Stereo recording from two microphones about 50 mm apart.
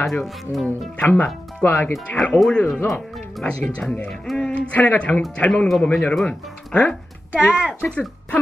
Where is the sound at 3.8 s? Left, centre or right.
Centre.